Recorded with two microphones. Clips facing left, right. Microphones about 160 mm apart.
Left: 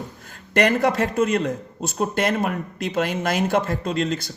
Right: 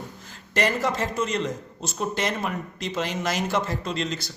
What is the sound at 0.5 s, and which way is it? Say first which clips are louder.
A man's voice: left 6 dB; 60° left (ahead or behind).